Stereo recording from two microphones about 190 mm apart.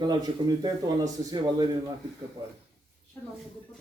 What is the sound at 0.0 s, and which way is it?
Speech, 20° right (ahead or behind).